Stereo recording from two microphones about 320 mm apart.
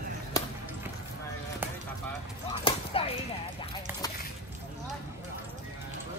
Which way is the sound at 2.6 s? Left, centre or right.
Centre.